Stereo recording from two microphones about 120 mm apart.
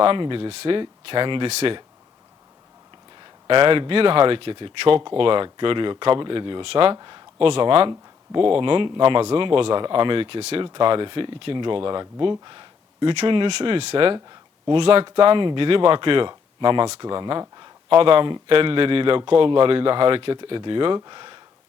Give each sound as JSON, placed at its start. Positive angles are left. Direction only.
{"t": 0.0, "sound": "a man's voice", "side_deg": -45}
{"t": 1.5, "sound": "speech", "side_deg": -65}
{"t": 3.2, "sound": "a man's voice", "side_deg": -45}
{"t": 6.9, "sound": "a man's voice", "side_deg": -40}